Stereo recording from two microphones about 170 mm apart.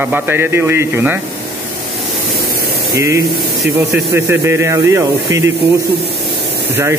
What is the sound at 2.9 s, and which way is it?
Speech, 15° right (ahead or behind).